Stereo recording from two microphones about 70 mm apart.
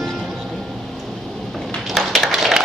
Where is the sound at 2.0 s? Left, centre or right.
Centre.